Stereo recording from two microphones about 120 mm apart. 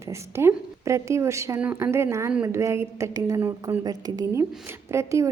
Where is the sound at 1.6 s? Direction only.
10° right (ahead or behind).